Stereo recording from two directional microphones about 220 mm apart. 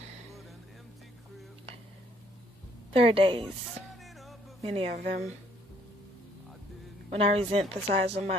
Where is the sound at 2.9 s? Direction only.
25° right (ahead or behind).